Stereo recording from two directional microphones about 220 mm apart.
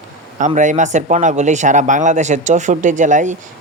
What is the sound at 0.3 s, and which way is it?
Speech, 35° right (ahead or behind).